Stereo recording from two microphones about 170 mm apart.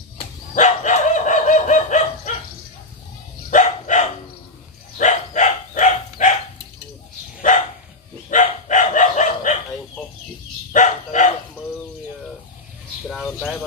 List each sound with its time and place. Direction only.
0.6 s dog: 45° left (ahead or behind)
3.4 s dog: 45° left (ahead or behind)
8.3 s dog: 45° left (ahead or behind)
10.7 s dog: 45° left (ahead or behind)